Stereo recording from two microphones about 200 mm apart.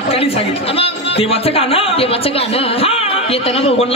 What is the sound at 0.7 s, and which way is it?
Speech, 30° left (ahead or behind).